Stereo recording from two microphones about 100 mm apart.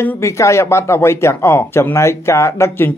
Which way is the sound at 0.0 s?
30° left (ahead or behind).